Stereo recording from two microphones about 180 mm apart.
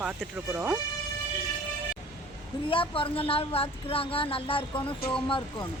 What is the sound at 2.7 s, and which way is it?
Speech, 30° left (ahead or behind).